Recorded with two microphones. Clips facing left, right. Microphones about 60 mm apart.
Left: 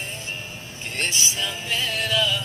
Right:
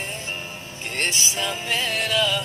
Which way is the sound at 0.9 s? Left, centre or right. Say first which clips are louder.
Right 1 dB; right.